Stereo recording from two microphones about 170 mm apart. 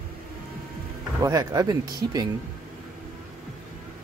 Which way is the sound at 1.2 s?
20° right (ahead or behind).